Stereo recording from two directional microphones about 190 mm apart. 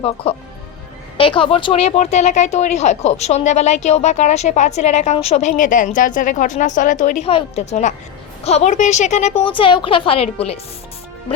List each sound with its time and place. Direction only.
1.2 s speech: 25° left (ahead or behind)